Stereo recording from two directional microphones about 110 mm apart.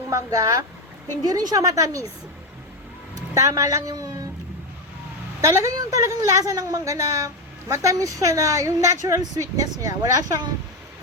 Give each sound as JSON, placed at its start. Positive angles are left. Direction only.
{"t": 0.1, "sound": "a woman's voice", "side_deg": -30}
{"t": 3.2, "sound": "a woman's voice", "side_deg": -30}
{"t": 5.4, "sound": "a woman's voice", "side_deg": -30}